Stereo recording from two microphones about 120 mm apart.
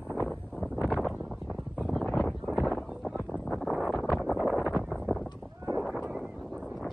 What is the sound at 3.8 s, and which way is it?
Wind noise, 5° right (ahead or behind).